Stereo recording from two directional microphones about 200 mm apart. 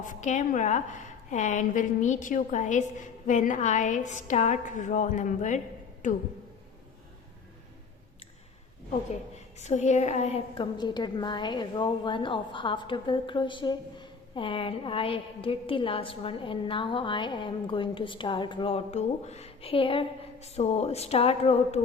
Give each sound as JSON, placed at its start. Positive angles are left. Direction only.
{"t": 0.0, "sound": "a woman's voice", "side_deg": 40}
{"t": 9.6, "sound": "a woman's voice", "side_deg": 35}